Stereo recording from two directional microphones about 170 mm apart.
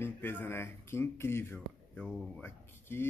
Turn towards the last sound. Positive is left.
turn(degrees=15)  # may be behind; listen again after turning